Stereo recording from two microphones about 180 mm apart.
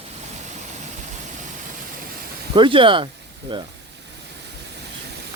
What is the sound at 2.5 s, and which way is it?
Speech, 30° right (ahead or behind).